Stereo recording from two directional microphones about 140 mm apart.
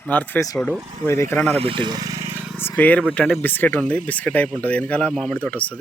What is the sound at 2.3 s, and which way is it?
Vehicle, 10° right (ahead or behind).